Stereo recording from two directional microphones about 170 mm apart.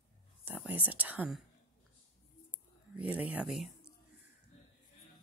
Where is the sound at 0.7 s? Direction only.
10° right (ahead or behind).